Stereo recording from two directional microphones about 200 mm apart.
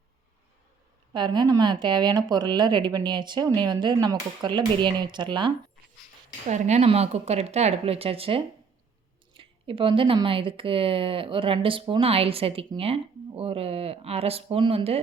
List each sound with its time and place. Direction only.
1.1 s speech: 20° right (ahead or behind)
6.5 s speech: 35° right (ahead or behind)